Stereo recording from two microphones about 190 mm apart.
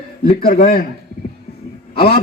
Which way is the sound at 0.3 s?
50° left (ahead or behind).